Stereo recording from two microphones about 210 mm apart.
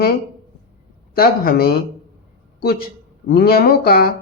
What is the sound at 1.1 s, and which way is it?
Speech, 45° left (ahead or behind).